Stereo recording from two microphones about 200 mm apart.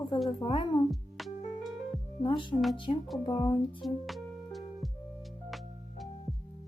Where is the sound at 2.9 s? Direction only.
30° left (ahead or behind).